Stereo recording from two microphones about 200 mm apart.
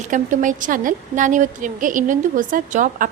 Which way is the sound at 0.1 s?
40° right (ahead or behind).